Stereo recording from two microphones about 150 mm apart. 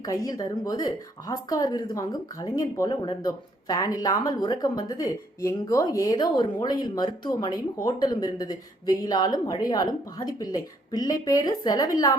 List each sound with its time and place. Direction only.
0.0 s a woman's voice: 25° left (ahead or behind)